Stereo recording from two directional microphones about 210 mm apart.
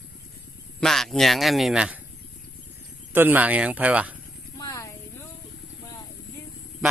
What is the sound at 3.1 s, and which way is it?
Speech, 10° right (ahead or behind).